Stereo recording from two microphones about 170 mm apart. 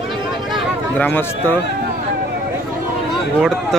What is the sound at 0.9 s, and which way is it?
Speech, 10° left (ahead or behind).